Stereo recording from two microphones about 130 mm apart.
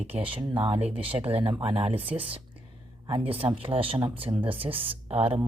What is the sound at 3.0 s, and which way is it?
Speech, 45° right (ahead or behind).